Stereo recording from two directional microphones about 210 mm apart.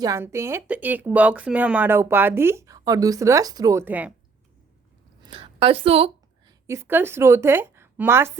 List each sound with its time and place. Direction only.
0.0 s speech: 15° right (ahead or behind)
5.2 s a woman's voice: 25° right (ahead or behind)
6.7 s speech: 10° right (ahead or behind)